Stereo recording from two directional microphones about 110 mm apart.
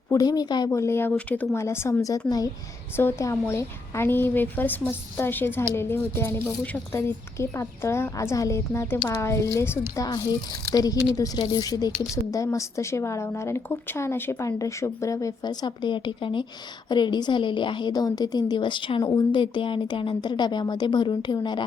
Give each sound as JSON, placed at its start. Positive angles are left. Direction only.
{"t": 0.1, "sound": "speech", "side_deg": 35}
{"t": 0.7, "sound": "a woman's voice", "side_deg": 25}
{"t": 1.5, "sound": "a woman's voice", "side_deg": 25}
{"t": 2.9, "sound": "a woman's voice", "side_deg": 20}